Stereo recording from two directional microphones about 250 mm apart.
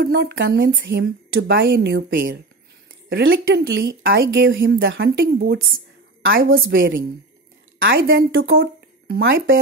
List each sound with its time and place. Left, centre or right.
0.0 s a woman's voice: right
8.3 s speech: right
8.5 s speech: right